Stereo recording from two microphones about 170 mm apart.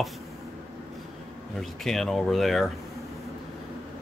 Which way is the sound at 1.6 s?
Centre (ahead or behind).